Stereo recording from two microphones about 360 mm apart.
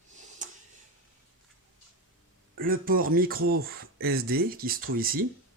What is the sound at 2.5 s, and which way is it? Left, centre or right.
Speech, right.